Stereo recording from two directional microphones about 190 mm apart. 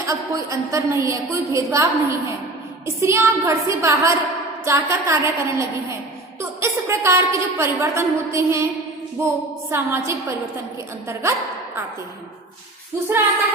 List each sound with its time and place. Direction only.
0.1 s a woman's voice: 15° right (ahead or behind)